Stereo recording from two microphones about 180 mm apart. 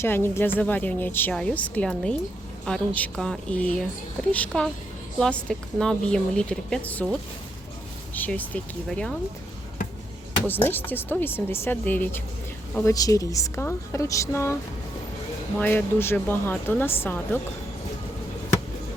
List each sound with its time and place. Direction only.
0.0 s a woman's voice: 15° left (ahead or behind)
10.4 s speech: 10° left (ahead or behind)
15.5 s speech: 10° left (ahead or behind)